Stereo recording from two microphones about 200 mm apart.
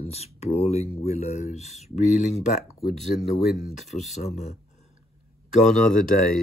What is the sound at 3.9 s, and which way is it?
Speech, 35° left (ahead or behind).